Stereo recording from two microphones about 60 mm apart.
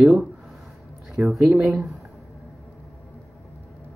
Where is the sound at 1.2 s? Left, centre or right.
Right.